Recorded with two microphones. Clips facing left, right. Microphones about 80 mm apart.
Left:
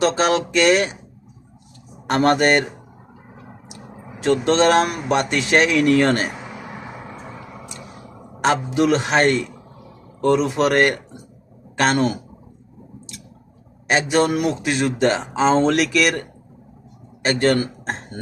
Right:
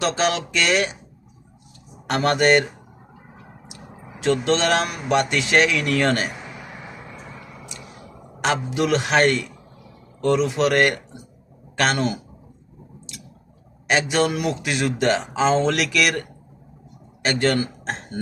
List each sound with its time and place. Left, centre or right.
0.0 s speech: left
2.0 s speech: left
4.2 s speech: left
8.4 s a man's voice: left
13.8 s speech: left
17.2 s speech: left